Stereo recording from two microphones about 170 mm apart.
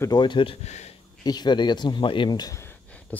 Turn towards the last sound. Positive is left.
turn(degrees=10)  # may be behind; listen again after turning